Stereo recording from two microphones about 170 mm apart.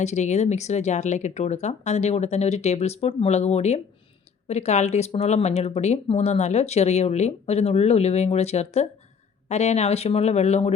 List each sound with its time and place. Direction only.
0.0 s speech: 40° left (ahead or behind)